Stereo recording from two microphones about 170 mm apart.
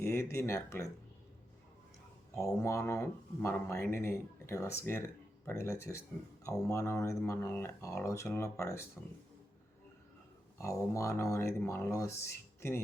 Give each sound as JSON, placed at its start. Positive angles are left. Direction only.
{"t": 0.0, "sound": "speech", "side_deg": 15}
{"t": 2.3, "sound": "speech", "side_deg": 15}
{"t": 10.6, "sound": "speech", "side_deg": 15}